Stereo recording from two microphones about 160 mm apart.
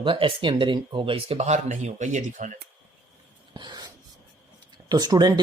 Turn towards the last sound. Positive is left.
turn(degrees=-25)  # may be behind; listen again after turning